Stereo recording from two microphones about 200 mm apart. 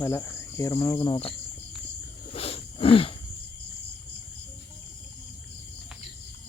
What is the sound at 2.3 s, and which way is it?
Wild animals, 30° left (ahead or behind).